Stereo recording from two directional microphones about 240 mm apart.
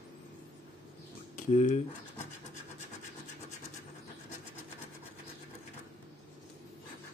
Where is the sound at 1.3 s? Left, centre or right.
Left.